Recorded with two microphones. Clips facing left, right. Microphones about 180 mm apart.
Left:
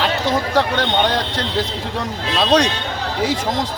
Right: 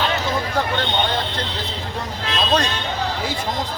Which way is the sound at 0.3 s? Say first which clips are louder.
Left 4 dB; 85° left.